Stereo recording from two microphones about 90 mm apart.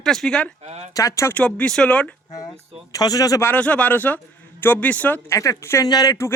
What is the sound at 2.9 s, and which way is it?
Speech, 45° left (ahead or behind).